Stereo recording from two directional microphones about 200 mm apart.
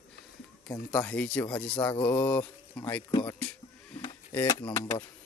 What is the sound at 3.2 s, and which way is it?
Speech, 5° left (ahead or behind).